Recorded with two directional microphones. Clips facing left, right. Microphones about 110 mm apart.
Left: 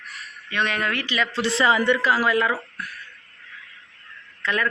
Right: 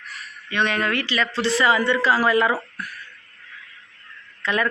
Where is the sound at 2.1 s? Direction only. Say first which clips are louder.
Right 2 dB; 5° right (ahead or behind).